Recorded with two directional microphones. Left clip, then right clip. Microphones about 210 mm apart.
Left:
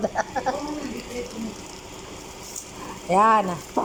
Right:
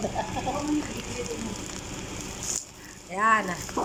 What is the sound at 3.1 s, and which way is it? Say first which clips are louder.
Speech: left 6 dB; 10° left (ahead or behind).